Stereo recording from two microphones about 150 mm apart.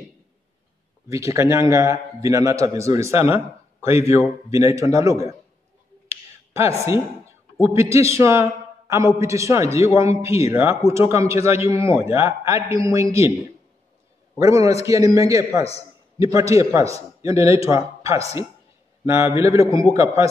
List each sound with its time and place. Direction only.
1.0 s a man's voice: 20° right (ahead or behind)
6.0 s a sound: 20° right (ahead or behind)
7.6 s a man's voice: 20° right (ahead or behind)
14.4 s a man's voice: 20° right (ahead or behind)